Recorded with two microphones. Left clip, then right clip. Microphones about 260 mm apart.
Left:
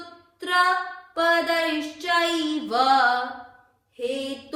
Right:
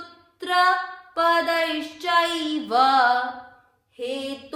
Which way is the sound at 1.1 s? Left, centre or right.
Right.